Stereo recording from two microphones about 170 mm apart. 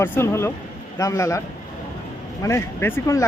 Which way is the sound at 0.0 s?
15° left (ahead or behind).